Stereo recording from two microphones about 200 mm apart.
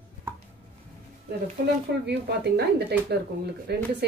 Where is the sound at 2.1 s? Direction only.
55° right (ahead or behind).